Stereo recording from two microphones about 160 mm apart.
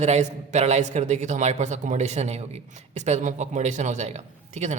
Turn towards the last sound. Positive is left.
turn(degrees=-45)  # may be behind; listen again after turning